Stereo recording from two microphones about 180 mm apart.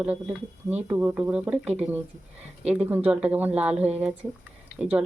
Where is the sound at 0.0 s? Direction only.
5° right (ahead or behind).